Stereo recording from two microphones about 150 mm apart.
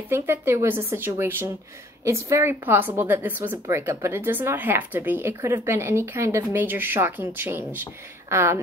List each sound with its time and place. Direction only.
0.1 s speech: 15° right (ahead or behind)